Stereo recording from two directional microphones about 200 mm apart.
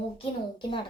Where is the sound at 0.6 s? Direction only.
25° left (ahead or behind).